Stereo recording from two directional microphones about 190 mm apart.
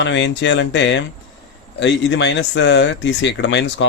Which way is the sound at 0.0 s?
70° left (ahead or behind).